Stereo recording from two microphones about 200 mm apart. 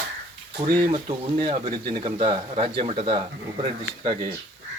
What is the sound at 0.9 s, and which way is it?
Speech, 30° right (ahead or behind).